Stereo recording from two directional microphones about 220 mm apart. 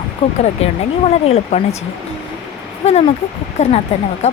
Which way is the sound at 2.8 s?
30° left (ahead or behind).